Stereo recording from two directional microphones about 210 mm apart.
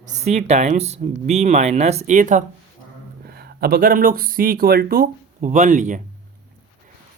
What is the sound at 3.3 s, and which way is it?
Speech, 45° right (ahead or behind).